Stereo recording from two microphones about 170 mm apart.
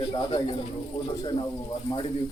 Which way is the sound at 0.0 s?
30° left (ahead or behind).